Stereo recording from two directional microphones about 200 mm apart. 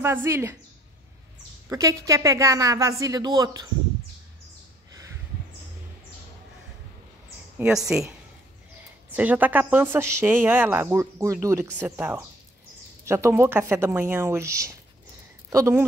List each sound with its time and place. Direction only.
0.0 s a woman's voice: 10° right (ahead or behind)
1.7 s a woman's voice: 15° right (ahead or behind)
7.5 s a woman's voice: 5° right (ahead or behind)
9.1 s a woman's voice: 10° right (ahead or behind)